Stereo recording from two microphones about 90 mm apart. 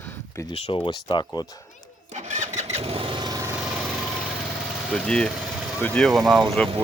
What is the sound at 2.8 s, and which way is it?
Vehicle, 90° right.